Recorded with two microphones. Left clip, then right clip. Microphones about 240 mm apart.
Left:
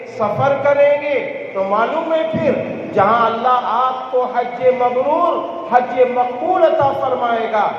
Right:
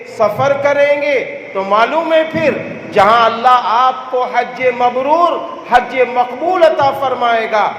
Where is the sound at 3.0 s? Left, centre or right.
Right.